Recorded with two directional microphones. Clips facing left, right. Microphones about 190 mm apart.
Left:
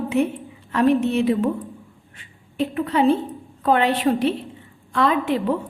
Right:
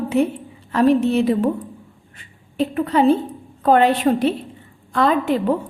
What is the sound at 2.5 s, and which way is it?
A woman's voice, 40° right (ahead or behind).